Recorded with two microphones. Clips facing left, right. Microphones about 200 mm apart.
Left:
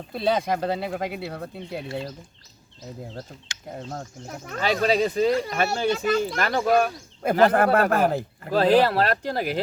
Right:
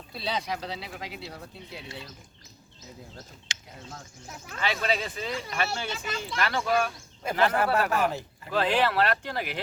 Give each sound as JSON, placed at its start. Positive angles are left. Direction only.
{"t": 0.1, "sound": "speech", "side_deg": 50}
{"t": 3.8, "sound": "speech", "side_deg": 50}